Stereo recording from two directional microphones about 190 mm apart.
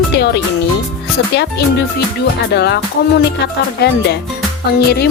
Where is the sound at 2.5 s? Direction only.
60° left (ahead or behind).